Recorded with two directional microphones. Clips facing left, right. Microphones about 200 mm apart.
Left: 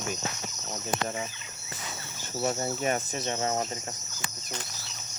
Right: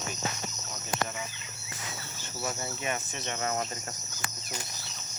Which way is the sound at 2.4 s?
30° left (ahead or behind).